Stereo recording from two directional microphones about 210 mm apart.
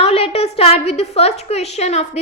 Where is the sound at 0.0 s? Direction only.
30° left (ahead or behind).